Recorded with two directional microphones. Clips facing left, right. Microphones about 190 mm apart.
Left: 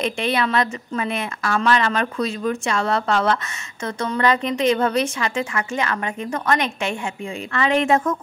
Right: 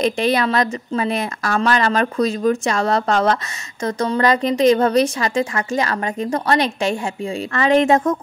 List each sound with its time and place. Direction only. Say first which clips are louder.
0.0 s a woman's voice: right 4 dB; 40° right (ahead or behind)